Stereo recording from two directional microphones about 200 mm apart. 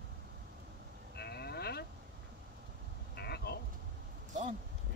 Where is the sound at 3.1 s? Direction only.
55° left (ahead or behind).